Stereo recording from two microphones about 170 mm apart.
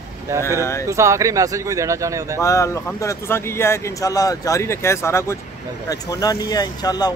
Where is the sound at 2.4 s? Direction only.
20° left (ahead or behind).